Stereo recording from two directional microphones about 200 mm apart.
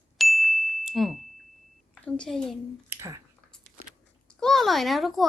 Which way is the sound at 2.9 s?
15° right (ahead or behind).